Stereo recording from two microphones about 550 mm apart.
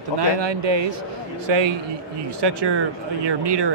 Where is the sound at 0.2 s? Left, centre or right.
Right.